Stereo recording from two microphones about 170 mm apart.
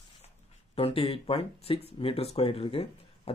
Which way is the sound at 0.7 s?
35° left (ahead or behind).